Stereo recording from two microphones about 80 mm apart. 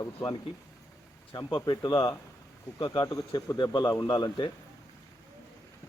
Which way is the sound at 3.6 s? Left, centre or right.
Left.